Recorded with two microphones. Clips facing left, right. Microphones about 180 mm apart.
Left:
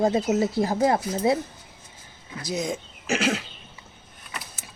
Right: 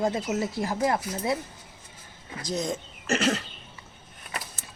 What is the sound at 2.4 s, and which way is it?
Speech, centre (ahead or behind).